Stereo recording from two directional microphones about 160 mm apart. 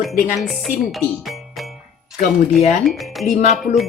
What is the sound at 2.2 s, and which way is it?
Speech, 45° left (ahead or behind).